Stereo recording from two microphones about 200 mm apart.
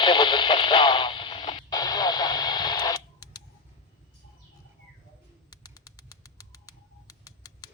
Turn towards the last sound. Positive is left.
turn(degrees=15)  # may be behind; listen again after turning